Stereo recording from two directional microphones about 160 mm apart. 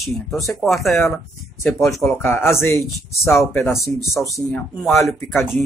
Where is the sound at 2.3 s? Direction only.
15° left (ahead or behind).